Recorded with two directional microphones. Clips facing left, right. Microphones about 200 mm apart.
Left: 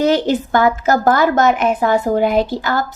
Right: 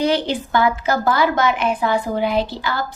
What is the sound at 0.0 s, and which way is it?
A woman's voice, 45° left (ahead or behind).